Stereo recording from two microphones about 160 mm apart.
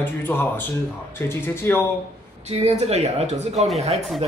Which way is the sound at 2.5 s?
40° right (ahead or behind).